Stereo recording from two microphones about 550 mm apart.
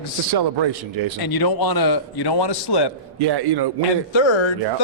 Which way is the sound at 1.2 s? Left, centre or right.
Left.